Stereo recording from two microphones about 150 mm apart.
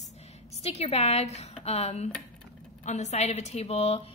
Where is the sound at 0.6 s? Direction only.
45° left (ahead or behind).